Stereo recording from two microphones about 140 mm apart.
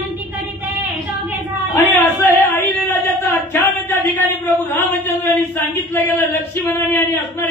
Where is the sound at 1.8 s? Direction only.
15° left (ahead or behind).